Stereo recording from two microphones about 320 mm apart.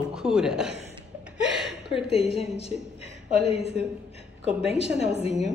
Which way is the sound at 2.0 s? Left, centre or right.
Centre.